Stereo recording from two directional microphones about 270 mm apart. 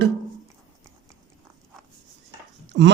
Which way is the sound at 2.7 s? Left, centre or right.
Right.